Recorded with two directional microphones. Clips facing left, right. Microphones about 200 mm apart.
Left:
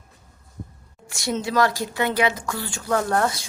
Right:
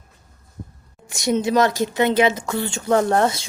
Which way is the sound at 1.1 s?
20° right (ahead or behind).